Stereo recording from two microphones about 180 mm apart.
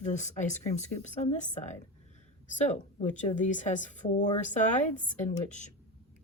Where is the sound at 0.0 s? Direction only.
40° left (ahead or behind).